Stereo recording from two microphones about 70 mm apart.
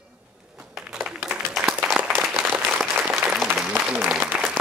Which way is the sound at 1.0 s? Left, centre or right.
Centre.